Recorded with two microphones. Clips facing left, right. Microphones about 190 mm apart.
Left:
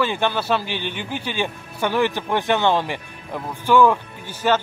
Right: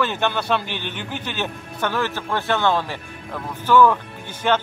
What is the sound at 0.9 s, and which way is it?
A man's voice, 10° left (ahead or behind).